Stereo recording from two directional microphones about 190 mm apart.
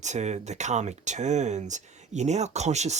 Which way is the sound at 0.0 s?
40° right (ahead or behind).